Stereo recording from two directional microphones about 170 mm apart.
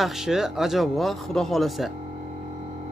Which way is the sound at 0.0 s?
5° right (ahead or behind).